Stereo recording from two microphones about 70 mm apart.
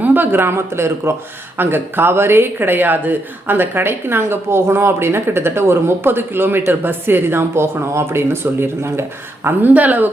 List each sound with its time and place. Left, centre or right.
0.0 s speech: right
9.6 s speech: right